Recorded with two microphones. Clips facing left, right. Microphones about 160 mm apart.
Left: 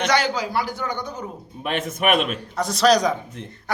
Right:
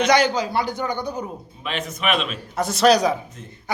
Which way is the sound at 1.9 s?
55° left (ahead or behind).